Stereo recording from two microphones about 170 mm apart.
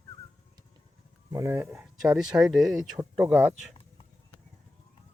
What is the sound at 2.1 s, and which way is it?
Speech, 5° right (ahead or behind).